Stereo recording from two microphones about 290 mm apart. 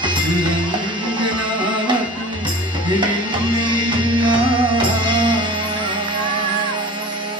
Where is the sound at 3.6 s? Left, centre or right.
Centre.